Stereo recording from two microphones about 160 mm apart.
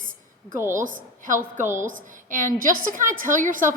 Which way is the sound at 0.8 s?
55° right (ahead or behind).